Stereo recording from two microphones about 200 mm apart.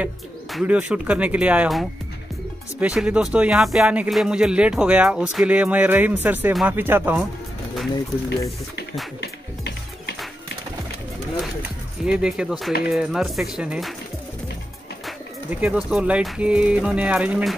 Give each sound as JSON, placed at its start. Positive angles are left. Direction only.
{"t": 0.0, "sound": "speech", "side_deg": -5}
{"t": 9.2, "sound": "music", "side_deg": 55}
{"t": 12.0, "sound": "speech", "side_deg": -5}
{"t": 15.6, "sound": "speech", "side_deg": -5}